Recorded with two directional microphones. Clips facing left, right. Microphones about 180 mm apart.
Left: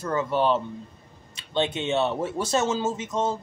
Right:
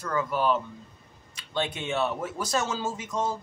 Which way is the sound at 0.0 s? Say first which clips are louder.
Left 3 dB; 25° left (ahead or behind).